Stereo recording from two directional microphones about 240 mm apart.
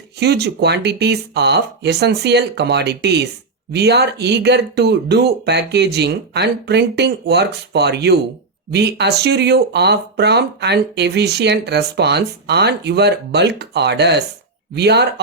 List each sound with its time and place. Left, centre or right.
0.2 s speech: right